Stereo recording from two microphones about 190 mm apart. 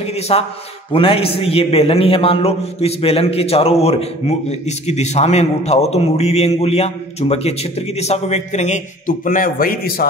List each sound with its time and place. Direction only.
0.0 s a man's voice: 35° left (ahead or behind); by 10.0 s 50° left (ahead or behind)